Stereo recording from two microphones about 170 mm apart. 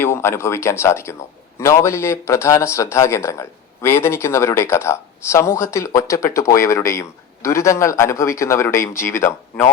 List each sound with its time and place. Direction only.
0.0 s speech: 15° left (ahead or behind)